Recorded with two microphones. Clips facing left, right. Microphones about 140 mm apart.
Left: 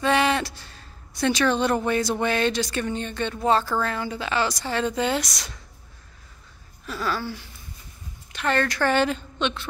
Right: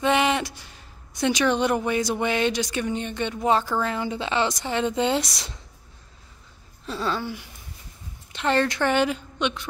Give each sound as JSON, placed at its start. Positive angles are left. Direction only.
{"t": 0.0, "sound": "speech", "side_deg": -20}
{"t": 6.9, "sound": "a sound", "side_deg": -25}
{"t": 8.3, "sound": "speech", "side_deg": -25}